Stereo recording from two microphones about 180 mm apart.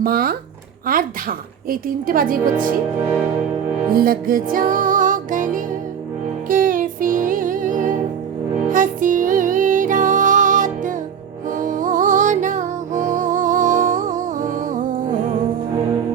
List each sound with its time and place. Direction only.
0.0 s a woman's voice: 55° right (ahead or behind)
3.9 s music: 55° right (ahead or behind)